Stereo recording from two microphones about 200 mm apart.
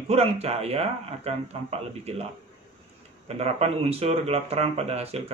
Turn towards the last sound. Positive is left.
turn(degrees=-30)  # may be behind; listen again after turning